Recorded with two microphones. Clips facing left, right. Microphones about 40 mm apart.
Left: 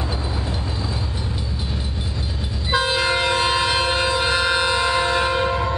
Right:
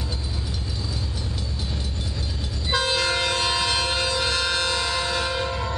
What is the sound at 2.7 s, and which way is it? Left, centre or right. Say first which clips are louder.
Train: left 3 dB; centre.